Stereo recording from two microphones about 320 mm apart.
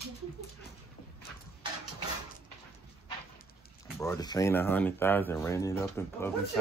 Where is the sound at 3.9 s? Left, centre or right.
Centre.